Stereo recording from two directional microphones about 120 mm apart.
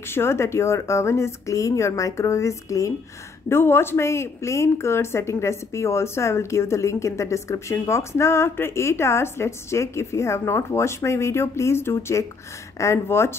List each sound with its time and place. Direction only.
0.1 s speech: 20° left (ahead or behind)